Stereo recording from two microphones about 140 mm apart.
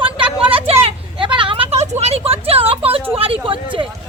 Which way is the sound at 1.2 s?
35° right (ahead or behind).